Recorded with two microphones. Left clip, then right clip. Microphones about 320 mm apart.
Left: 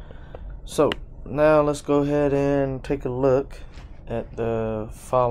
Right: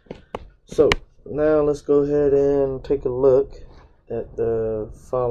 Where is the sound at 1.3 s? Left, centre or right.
Left.